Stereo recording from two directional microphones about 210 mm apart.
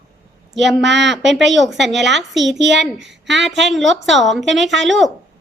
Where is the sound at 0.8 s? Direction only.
55° right (ahead or behind).